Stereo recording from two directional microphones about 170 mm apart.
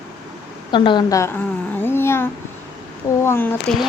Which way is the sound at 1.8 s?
15° left (ahead or behind).